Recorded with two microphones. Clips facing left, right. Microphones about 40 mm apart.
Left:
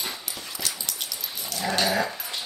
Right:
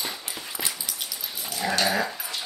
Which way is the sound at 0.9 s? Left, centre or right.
Centre.